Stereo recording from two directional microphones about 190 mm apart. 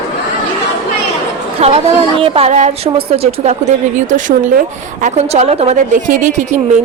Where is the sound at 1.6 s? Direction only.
30° right (ahead or behind).